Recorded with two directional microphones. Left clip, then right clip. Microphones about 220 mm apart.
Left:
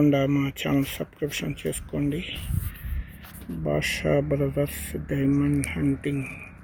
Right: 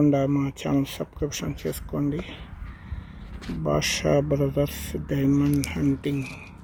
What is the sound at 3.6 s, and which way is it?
Speech, centre (ahead or behind).